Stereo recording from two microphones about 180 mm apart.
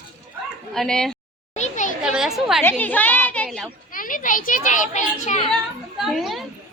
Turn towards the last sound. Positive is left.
turn(degrees=0)  # may be behind; listen again after turning